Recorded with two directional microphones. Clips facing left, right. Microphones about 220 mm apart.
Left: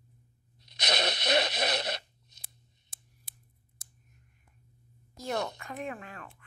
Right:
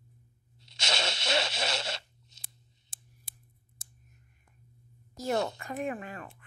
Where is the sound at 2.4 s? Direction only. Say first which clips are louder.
Right 1 dB; 30° right (ahead or behind).